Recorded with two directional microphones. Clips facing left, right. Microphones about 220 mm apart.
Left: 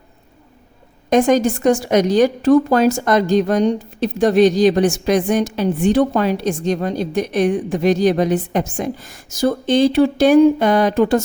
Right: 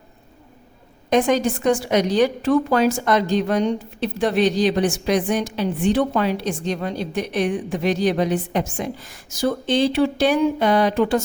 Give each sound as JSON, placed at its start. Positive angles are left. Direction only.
{"t": 1.1, "sound": "speech", "side_deg": 45}